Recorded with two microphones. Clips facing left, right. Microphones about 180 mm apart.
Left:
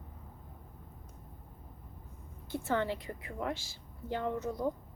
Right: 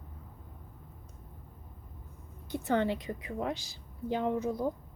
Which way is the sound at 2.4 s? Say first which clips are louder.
Right 3 dB; 20° right (ahead or behind).